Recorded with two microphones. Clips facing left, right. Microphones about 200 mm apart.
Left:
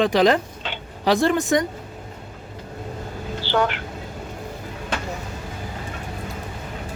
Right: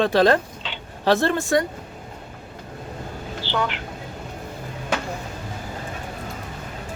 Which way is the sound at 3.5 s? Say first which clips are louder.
Left 4 dB; 50° left (ahead or behind).